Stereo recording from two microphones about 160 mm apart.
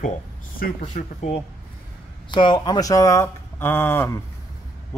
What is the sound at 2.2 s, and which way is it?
A man's voice, 30° left (ahead or behind).